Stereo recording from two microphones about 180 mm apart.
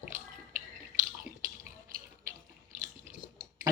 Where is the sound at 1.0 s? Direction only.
45° right (ahead or behind).